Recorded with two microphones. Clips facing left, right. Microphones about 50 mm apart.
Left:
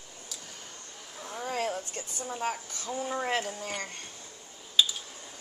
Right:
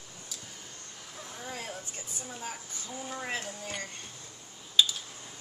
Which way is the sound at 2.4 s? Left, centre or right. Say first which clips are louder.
Left 11 dB; left.